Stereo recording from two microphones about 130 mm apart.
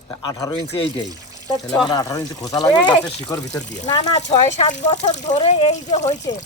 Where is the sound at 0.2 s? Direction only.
25° left (ahead or behind).